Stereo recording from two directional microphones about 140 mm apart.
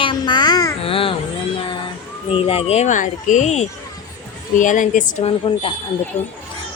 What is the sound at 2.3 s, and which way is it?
A woman's voice, 45° left (ahead or behind).